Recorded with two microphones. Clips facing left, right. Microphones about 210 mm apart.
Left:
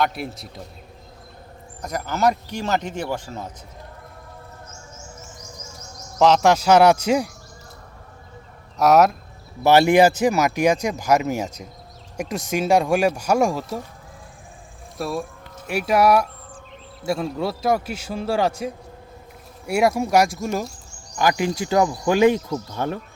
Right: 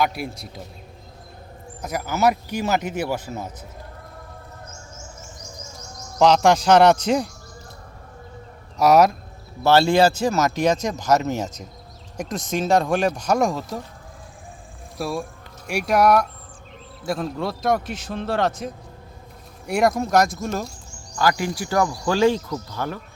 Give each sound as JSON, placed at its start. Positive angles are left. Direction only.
{"t": 0.0, "sound": "a man's voice", "side_deg": 0}
{"t": 1.8, "sound": "speech", "side_deg": -5}
{"t": 6.1, "sound": "speech", "side_deg": 0}
{"t": 8.8, "sound": "a man's voice", "side_deg": 0}
{"t": 9.6, "sound": "speech", "side_deg": 15}
{"t": 14.9, "sound": "a man's voice", "side_deg": 0}
{"t": 21.2, "sound": "speech", "side_deg": 20}